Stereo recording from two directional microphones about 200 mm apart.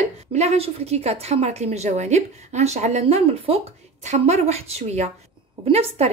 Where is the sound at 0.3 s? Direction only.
30° right (ahead or behind).